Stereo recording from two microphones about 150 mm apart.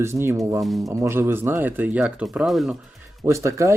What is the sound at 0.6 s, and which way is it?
Speech, centre (ahead or behind).